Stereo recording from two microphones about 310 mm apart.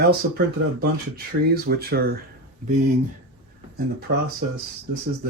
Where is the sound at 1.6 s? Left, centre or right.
Right.